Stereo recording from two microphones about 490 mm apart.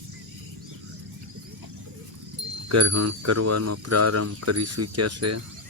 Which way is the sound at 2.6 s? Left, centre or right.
Right.